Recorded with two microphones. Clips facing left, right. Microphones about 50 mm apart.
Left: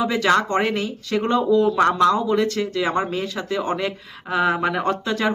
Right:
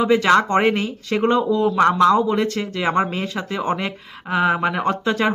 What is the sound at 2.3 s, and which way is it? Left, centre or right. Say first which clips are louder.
Speech: left 1 dB; centre.